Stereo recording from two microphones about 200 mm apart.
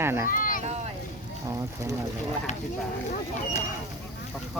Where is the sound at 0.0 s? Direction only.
10° right (ahead or behind).